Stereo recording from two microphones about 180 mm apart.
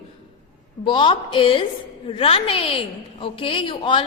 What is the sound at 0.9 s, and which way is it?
A woman's voice, 30° left (ahead or behind).